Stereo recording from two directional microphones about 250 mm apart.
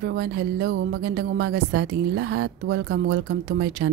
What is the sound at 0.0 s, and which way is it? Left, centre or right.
Speech, right.